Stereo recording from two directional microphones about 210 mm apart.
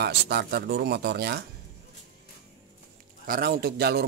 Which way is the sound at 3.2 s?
45° right (ahead or behind).